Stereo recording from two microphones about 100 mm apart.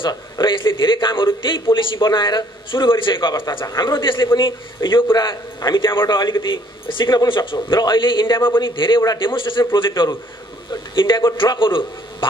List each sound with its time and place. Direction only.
0.0 s a man's voice: 50° left (ahead or behind)
9.0 s a man's voice: 40° left (ahead or behind)
9.3 s a man's voice: 55° left (ahead or behind)